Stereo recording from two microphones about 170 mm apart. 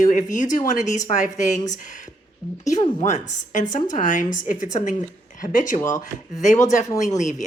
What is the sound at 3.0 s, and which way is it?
A woman's voice, 45° left (ahead or behind).